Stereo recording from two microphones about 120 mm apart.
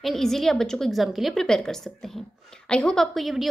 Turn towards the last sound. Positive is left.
turn(degrees=0)  # may be behind; listen again after turning